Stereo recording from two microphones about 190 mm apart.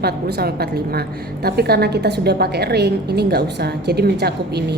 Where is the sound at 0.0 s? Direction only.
55° right (ahead or behind).